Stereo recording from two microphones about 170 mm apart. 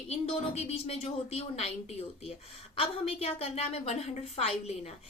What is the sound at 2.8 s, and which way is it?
A woman's voice, 35° left (ahead or behind).